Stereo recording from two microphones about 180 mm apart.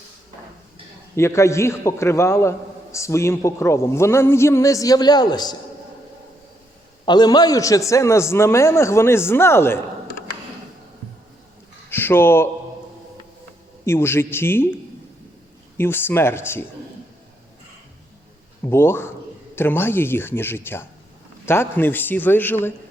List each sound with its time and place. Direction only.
1.1 s a man's voice: 15° left (ahead or behind)
7.0 s a man's voice: 25° left (ahead or behind)
11.9 s a sound: 10° left (ahead or behind)
13.8 s a man's voice: 15° left (ahead or behind)
15.8 s a man's voice: 10° left (ahead or behind)
18.6 s a man's voice: 15° left (ahead or behind)